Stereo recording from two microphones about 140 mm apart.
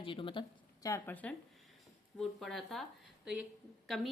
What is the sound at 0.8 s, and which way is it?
Speech, 20° left (ahead or behind).